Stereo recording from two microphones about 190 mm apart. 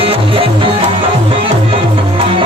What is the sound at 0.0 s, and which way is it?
Music, 30° right (ahead or behind).